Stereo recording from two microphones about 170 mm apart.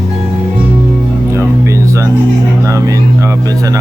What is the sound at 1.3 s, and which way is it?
Music, 15° right (ahead or behind).